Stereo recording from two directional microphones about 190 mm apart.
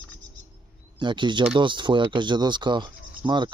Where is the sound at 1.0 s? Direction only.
25° right (ahead or behind).